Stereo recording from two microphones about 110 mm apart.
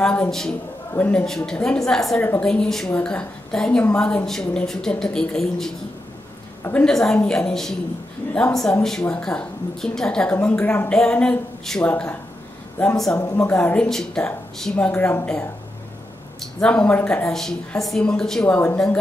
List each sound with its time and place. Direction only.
0.0 s a woman's voice: 10° left (ahead or behind)
12.9 s speech: 5° left (ahead or behind)
13.2 s a woman's voice: 30° left (ahead or behind)
13.5 s a woman's voice: 10° left (ahead or behind)
16.5 s a woman's voice: 10° left (ahead or behind)